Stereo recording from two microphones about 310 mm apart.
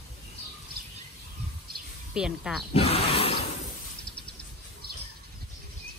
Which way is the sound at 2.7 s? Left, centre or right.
Centre.